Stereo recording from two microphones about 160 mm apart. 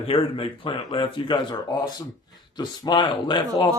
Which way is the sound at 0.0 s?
35° left (ahead or behind).